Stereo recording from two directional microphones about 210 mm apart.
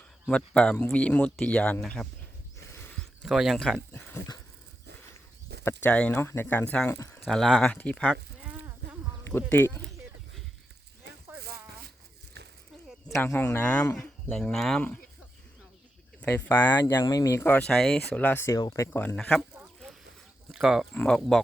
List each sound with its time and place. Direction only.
0.3 s speech: 5° left (ahead or behind)
5.6 s speech: 5° left (ahead or behind)
7.3 s speech: centre (ahead or behind)
8.8 s a sound: 50° right (ahead or behind)
9.2 s speech: 10° left (ahead or behind)
13.1 s speech: 10° left (ahead or behind)
16.2 s speech: 10° left (ahead or behind)
19.5 s a sound: centre (ahead or behind)
20.5 s speech: centre (ahead or behind)